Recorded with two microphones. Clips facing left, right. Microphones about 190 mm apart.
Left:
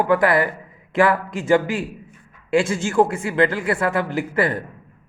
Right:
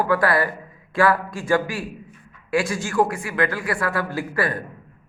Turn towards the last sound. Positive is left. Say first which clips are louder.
# left 3 dB
turn(degrees=20)  # may be behind; listen again after turning